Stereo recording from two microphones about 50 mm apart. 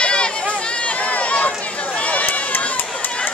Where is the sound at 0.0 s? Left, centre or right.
Centre.